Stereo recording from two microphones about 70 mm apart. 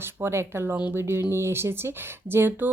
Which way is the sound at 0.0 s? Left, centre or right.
Right.